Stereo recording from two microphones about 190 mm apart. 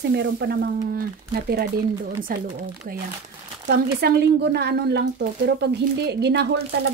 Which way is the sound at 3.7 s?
60° right (ahead or behind).